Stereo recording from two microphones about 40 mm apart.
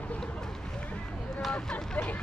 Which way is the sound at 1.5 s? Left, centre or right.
Left.